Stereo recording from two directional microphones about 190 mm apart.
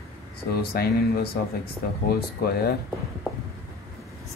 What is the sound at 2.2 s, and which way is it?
Speech, 55° left (ahead or behind).